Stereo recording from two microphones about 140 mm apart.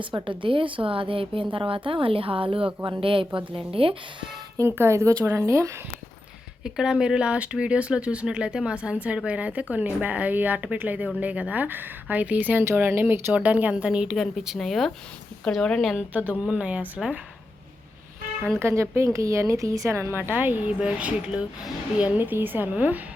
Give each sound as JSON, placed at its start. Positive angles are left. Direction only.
{"t": 0.3, "sound": "a woman's voice", "side_deg": -35}
{"t": 4.5, "sound": "a woman's voice", "side_deg": -15}
{"t": 6.7, "sound": "a woman's voice", "side_deg": -5}
{"t": 18.6, "sound": "a woman's voice", "side_deg": -20}